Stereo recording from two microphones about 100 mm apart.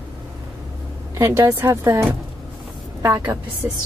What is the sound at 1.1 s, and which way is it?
Speech, 35° right (ahead or behind).